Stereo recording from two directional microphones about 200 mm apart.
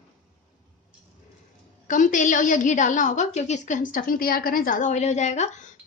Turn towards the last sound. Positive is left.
turn(degrees=35)  # may be behind; listen again after turning